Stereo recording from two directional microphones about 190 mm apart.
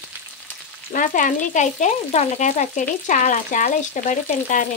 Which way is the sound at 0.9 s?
45° left (ahead or behind).